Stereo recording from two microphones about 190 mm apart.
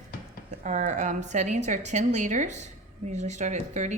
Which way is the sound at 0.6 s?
40° right (ahead or behind).